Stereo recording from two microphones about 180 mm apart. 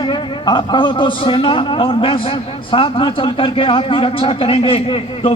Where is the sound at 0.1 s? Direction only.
25° left (ahead or behind).